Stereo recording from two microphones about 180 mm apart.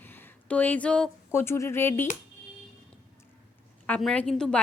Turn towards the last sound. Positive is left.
turn(degrees=5)  # may be behind; listen again after turning